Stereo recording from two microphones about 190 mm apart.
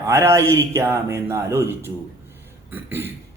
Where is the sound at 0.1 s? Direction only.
15° right (ahead or behind).